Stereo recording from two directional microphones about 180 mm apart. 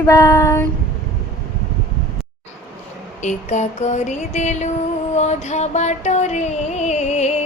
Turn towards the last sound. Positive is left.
turn(degrees=40)  # may be behind; listen again after turning